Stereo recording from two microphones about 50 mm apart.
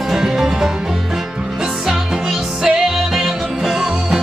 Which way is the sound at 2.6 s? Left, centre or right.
Centre.